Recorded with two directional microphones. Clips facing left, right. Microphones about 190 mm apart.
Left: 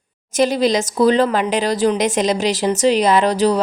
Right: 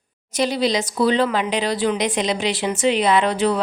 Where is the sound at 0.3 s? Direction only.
45° left (ahead or behind).